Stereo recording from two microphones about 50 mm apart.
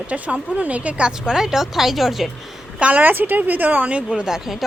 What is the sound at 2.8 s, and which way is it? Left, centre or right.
Speech, right.